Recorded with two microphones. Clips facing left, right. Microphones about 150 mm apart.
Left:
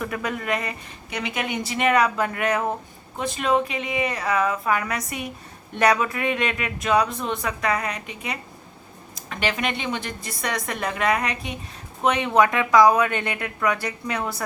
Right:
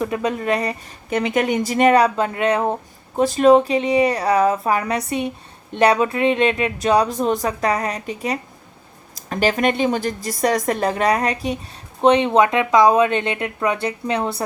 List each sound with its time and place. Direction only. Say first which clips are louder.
0.0 s speech: right 6 dB; 25° right (ahead or behind)
1.1 s speech: right 9 dB; 45° right (ahead or behind); by 14.4 s 30° right (ahead or behind)